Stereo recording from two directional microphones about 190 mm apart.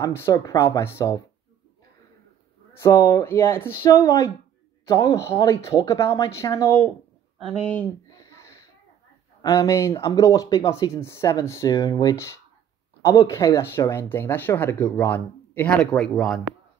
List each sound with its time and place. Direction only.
0.0 s speech: 15° left (ahead or behind)
2.8 s speech: 15° left (ahead or behind)
8.2 s a sound: 15° left (ahead or behind)
9.4 s speech: 20° left (ahead or behind)